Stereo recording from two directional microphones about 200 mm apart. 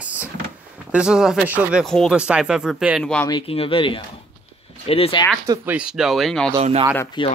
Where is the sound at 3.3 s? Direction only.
25° left (ahead or behind).